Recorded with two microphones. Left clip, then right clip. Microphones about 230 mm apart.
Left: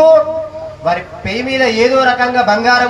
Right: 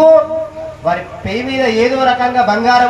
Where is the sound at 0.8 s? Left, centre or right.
Left.